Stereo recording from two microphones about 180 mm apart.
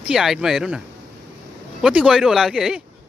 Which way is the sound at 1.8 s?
5° right (ahead or behind).